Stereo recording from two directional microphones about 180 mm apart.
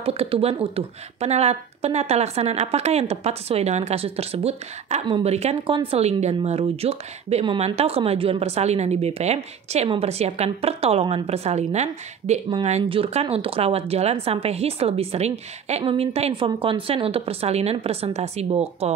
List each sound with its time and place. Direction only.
0.0 s speech: 30° right (ahead or behind)